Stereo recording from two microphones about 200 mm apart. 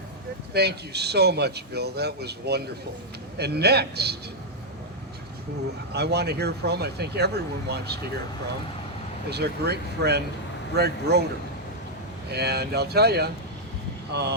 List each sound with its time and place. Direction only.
0.5 s a man's voice: 55° right (ahead or behind)
5.9 s a man's voice: 55° right (ahead or behind)
9.3 s a man's voice: 55° right (ahead or behind)
12.3 s a man's voice: 55° right (ahead or behind)